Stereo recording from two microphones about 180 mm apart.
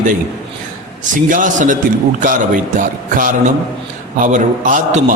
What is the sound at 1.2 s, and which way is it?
A man's voice, 45° right (ahead or behind).